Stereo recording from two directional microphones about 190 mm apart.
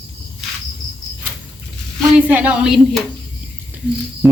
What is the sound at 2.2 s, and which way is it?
Speech, 10° right (ahead or behind).